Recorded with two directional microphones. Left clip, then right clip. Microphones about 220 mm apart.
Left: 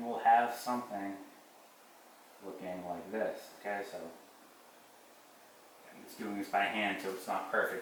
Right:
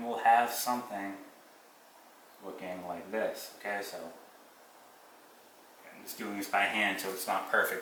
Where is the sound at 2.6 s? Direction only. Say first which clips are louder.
Right 1 dB; 10° left (ahead or behind).